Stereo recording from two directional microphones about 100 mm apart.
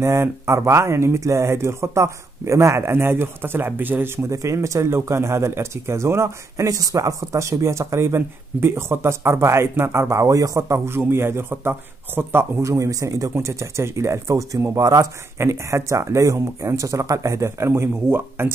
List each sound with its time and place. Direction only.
0.0 s speech: 30° right (ahead or behind)